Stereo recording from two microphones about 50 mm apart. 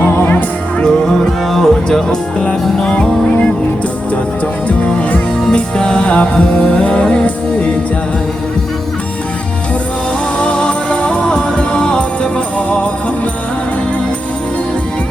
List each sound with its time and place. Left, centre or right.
0.0 s music: left
0.8 s music: centre
5.1 s music: centre
10.3 s music: centre